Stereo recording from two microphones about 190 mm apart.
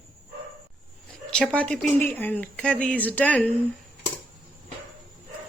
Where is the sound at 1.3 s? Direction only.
5° left (ahead or behind).